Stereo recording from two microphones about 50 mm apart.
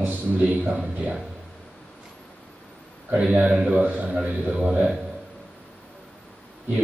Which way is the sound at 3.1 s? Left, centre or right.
Right.